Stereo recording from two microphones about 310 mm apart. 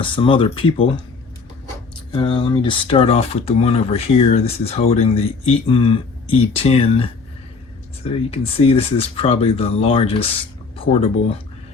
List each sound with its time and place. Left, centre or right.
0.0 s speech: centre
2.1 s speech: centre